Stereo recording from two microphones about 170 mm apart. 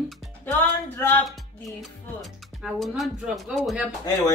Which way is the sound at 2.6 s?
Centre (ahead or behind).